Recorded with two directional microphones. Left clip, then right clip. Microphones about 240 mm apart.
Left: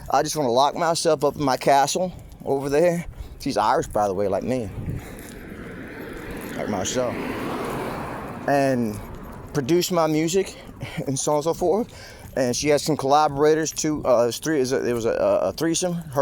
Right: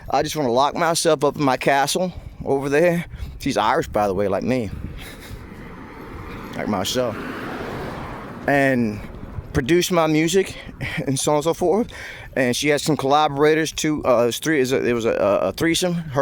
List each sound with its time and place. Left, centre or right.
0.1 s speech: right
6.6 s speech: right
7.2 s speech: centre
7.9 s a sound: left
8.4 s speech: right